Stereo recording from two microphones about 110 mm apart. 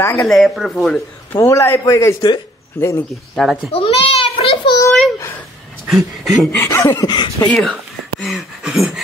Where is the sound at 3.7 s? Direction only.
60° left (ahead or behind).